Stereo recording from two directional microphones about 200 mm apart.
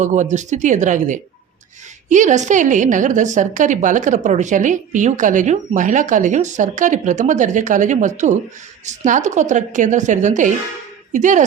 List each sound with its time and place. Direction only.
0.0 s a woman's voice: 35° right (ahead or behind)